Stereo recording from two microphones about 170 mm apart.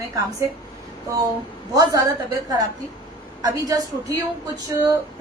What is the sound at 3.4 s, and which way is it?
Speech, 20° right (ahead or behind).